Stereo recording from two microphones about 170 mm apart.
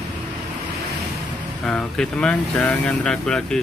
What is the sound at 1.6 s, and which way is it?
Speech, 5° left (ahead or behind).